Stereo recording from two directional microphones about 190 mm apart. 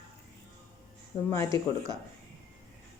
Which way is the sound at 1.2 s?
15° left (ahead or behind).